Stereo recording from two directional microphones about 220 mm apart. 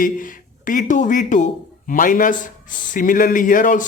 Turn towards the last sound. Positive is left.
turn(degrees=35)  # may be behind; listen again after turning